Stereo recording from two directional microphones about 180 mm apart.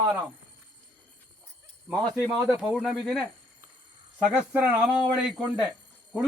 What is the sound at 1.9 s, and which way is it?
Speech, centre (ahead or behind).